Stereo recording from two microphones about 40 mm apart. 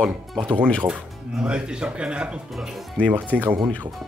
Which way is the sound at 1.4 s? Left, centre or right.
Right.